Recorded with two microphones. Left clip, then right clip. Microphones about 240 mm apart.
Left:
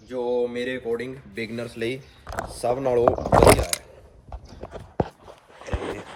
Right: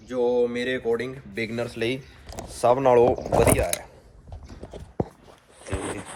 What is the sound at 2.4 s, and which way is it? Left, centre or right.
Speech, right.